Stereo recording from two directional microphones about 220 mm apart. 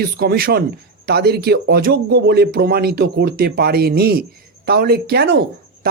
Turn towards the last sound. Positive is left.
turn(degrees=-45)  # may be behind; listen again after turning